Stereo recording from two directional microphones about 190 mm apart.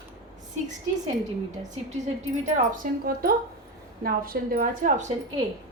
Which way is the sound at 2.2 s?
40° right (ahead or behind).